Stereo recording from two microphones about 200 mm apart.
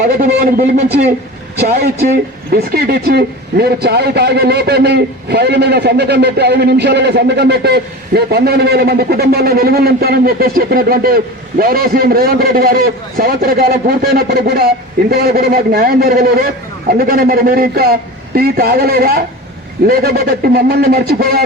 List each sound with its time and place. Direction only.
0.2 s speech: 45° right (ahead or behind)